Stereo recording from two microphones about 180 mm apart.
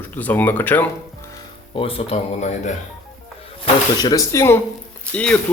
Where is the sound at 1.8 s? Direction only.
30° left (ahead or behind).